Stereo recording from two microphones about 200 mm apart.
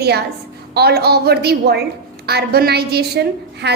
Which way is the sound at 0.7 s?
55° right (ahead or behind).